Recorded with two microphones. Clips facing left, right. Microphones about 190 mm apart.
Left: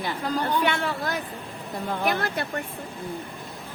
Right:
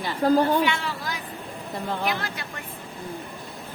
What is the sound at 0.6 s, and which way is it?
Speech, 55° left (ahead or behind).